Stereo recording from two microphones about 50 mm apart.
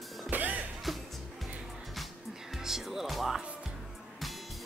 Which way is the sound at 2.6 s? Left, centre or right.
Centre.